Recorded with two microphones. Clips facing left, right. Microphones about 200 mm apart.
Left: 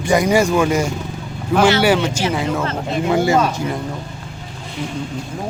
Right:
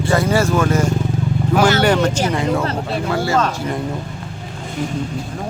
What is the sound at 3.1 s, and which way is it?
Speech, 20° left (ahead or behind).